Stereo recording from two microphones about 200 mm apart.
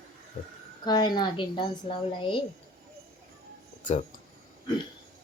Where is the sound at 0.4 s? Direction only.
35° left (ahead or behind).